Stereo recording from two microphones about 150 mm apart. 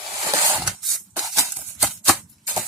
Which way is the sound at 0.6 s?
Centre (ahead or behind).